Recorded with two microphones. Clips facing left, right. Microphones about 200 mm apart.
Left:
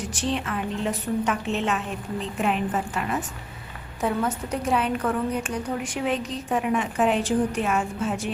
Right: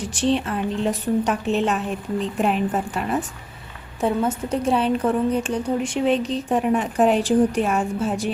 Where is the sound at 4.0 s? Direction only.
25° right (ahead or behind).